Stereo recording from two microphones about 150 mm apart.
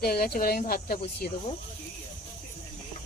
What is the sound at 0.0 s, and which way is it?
Speech, 90° left.